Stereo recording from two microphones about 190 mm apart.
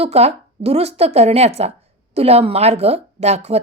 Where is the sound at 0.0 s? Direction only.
35° right (ahead or behind).